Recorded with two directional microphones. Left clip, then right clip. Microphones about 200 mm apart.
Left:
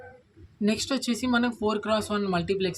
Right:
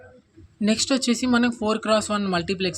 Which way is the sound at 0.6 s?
35° right (ahead or behind).